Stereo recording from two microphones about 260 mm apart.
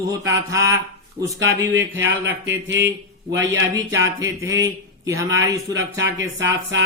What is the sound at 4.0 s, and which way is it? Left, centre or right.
A man's voice, centre.